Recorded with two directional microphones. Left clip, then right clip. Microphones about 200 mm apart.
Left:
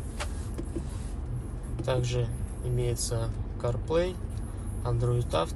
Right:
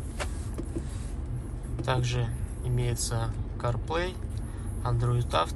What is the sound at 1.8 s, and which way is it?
A man's voice, 20° left (ahead or behind).